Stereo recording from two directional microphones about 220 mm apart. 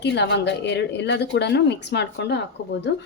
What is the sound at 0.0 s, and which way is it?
A woman's voice, 50° left (ahead or behind).